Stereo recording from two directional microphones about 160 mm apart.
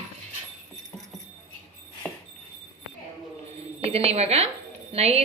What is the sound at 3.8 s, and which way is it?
A woman's voice, 40° right (ahead or behind).